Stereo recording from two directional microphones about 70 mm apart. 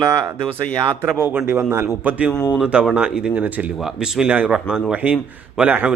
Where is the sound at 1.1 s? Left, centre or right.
Right.